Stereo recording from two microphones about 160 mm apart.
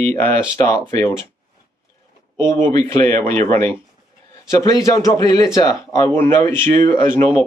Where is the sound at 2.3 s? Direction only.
15° left (ahead or behind).